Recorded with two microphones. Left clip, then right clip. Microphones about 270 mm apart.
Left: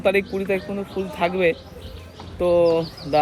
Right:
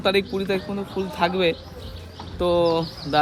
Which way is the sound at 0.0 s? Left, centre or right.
Centre.